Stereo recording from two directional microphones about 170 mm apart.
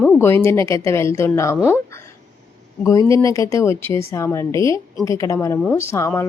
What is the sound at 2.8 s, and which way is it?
Speech, 20° left (ahead or behind).